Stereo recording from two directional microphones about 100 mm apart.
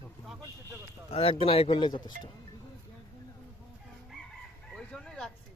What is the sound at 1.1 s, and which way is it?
Speech, 75° left (ahead or behind).